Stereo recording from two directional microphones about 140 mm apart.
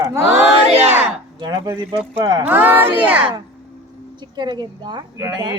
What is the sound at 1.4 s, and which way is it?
Speech, 30° right (ahead or behind).